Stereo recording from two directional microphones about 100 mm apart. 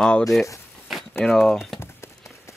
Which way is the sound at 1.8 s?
25° left (ahead or behind).